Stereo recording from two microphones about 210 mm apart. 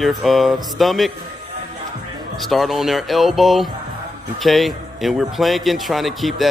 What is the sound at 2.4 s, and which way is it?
Speech, centre (ahead or behind).